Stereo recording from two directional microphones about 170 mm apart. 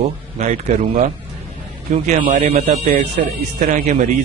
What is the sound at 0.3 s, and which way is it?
Speech, 40° right (ahead or behind).